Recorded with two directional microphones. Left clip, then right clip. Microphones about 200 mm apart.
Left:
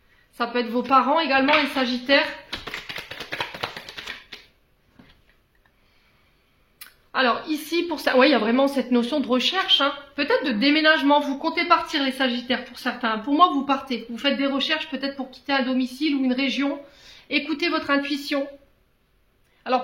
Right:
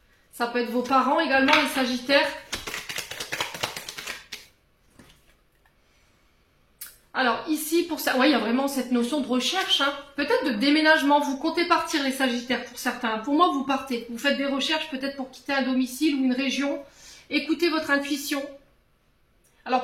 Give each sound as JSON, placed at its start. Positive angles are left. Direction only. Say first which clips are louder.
{"t": 0.4, "sound": "a woman's voice", "louder": "left 1 dB", "side_deg": 40}
{"t": 2.9, "sound": "a sound", "louder": "even", "side_deg": 25}
{"t": 6.8, "sound": "a woman's voice", "louder": "left 3 dB", "side_deg": 40}